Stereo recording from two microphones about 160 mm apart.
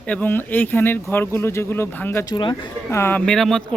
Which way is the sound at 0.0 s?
10° left (ahead or behind).